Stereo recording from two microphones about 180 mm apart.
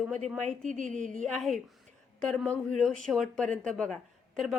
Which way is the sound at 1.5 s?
Centre (ahead or behind).